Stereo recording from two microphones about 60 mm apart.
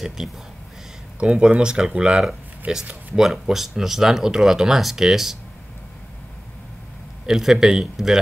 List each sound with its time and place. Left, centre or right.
0.2 s speech: centre
1.2 s speech: centre
3.2 s speech: centre
7.2 s speech: centre